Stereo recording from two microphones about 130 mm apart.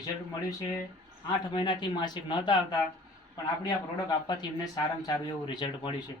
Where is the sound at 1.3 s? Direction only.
35° left (ahead or behind).